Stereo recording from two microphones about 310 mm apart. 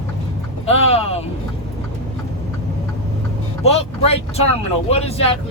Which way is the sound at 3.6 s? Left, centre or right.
Centre.